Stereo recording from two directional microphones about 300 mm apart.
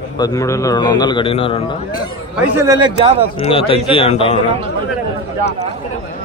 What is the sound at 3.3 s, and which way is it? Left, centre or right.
A man's voice, centre.